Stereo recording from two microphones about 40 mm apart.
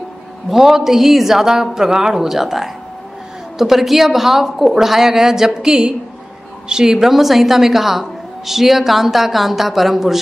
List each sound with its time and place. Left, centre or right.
0.5 s a woman's voice: centre